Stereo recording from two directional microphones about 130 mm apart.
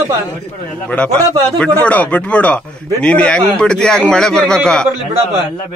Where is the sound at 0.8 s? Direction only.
10° left (ahead or behind).